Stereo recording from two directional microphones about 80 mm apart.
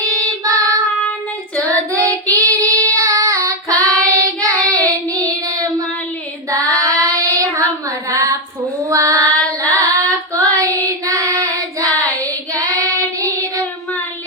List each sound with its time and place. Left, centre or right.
0.0 s child singing: right